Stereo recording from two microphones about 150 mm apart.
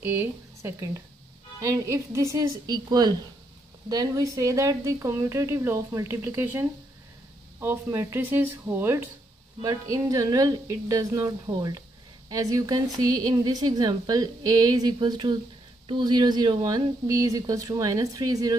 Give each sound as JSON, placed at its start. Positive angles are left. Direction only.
{"t": 0.0, "sound": "a woman's voice", "side_deg": -15}